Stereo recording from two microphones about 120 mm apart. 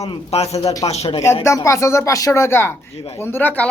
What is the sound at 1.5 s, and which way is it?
Speech, 25° left (ahead or behind).